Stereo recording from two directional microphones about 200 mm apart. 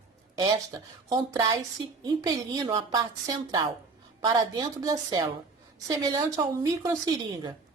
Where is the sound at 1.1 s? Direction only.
15° right (ahead or behind).